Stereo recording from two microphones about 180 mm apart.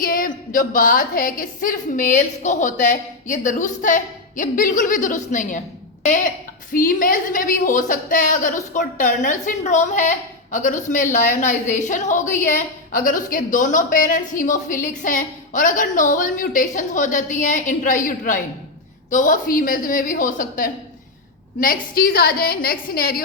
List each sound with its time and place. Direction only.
0.0 s a woman's voice: 50° left (ahead or behind)
21.9 s a woman's voice: 55° left (ahead or behind)